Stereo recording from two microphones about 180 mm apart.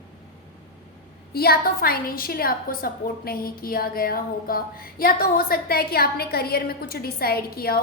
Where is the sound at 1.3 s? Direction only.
55° left (ahead or behind).